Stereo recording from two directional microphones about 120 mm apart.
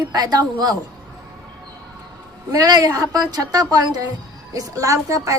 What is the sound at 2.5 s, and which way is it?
A woman's voice, 30° right (ahead or behind).